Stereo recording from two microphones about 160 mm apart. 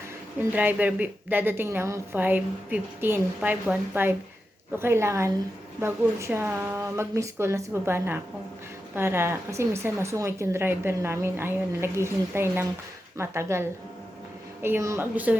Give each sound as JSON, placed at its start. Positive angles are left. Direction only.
{"t": 0.3, "sound": "a woman's voice", "side_deg": -10}